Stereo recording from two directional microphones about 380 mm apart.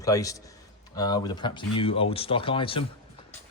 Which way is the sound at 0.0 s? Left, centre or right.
Centre.